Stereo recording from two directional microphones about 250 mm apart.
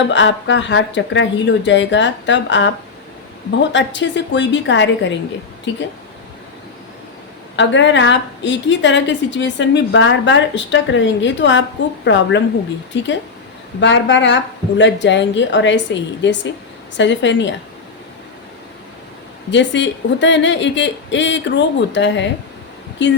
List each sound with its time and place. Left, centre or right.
0.1 s a woman's voice: left
7.5 s a woman's voice: left
19.5 s a woman's voice: left